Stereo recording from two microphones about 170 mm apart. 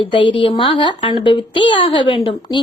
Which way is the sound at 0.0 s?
30° left (ahead or behind).